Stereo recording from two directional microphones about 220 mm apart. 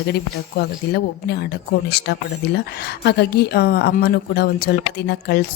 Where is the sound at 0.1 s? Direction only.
50° left (ahead or behind).